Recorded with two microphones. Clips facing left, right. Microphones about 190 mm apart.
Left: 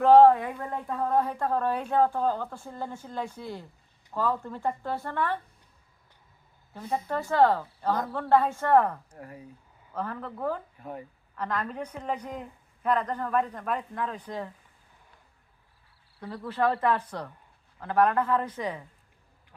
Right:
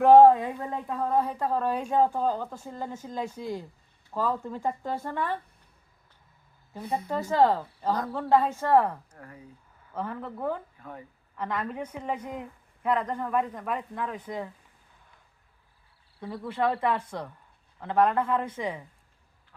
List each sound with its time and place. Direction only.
0.0 s a woman's voice: 15° right (ahead or behind)
0.9 s a woman's voice: centre (ahead or behind)
6.7 s a woman's voice: 10° right (ahead or behind)
9.1 s speech: 20° left (ahead or behind)
9.9 s a woman's voice: 15° right (ahead or behind)
16.2 s a woman's voice: 15° right (ahead or behind)